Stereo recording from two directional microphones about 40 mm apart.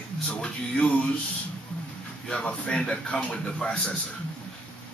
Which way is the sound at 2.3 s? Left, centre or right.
Centre.